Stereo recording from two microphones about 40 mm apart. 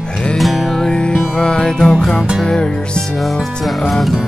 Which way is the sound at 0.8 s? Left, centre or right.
Centre.